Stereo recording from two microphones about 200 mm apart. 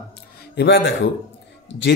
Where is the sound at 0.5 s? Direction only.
65° left (ahead or behind).